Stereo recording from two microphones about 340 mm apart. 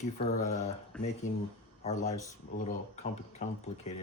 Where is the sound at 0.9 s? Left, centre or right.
Centre.